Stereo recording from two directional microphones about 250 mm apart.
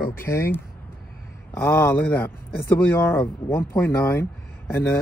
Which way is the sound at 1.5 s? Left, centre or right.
Centre.